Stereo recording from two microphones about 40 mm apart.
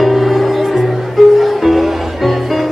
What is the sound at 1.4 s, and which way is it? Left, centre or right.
Music, centre.